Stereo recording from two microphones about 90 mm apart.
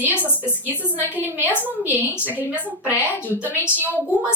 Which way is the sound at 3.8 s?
20° right (ahead or behind).